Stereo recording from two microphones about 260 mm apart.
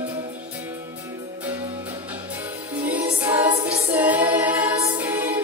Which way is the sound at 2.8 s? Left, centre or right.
Centre.